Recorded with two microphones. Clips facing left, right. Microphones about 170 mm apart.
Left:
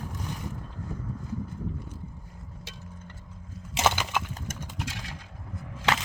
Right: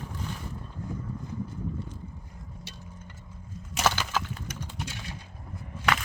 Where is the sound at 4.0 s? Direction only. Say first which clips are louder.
Even; 10° left (ahead or behind).